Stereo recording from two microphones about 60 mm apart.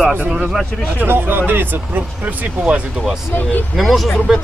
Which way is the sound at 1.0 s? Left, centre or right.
Right.